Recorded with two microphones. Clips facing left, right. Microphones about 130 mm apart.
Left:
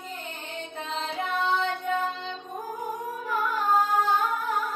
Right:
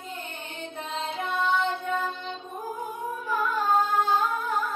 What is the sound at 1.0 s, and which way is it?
Music, centre (ahead or behind).